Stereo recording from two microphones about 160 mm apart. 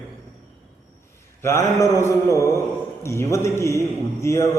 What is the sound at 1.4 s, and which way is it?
Mantra, 15° left (ahead or behind).